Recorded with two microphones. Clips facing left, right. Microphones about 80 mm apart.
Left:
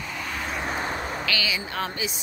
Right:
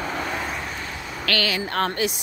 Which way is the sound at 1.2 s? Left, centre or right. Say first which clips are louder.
Right 4 dB; right.